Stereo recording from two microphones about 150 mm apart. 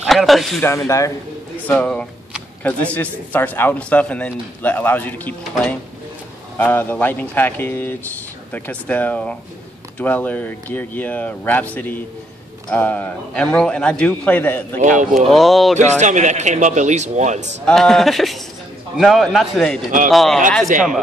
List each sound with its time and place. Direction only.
0.0 s speech: centre (ahead or behind)
0.6 s speech: 20° left (ahead or behind)
1.7 s speech: 10° left (ahead or behind)
14.8 s speech: 55° right (ahead or behind)
15.2 s a man's voice: centre (ahead or behind)
16.0 s a man's voice: 55° right (ahead or behind)
17.6 s a man's voice: 5° left (ahead or behind)